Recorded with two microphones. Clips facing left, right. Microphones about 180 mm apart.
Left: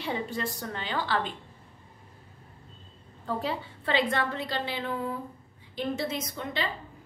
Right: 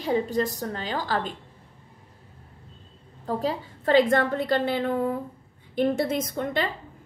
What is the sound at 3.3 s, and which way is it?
A woman's voice, 40° right (ahead or behind).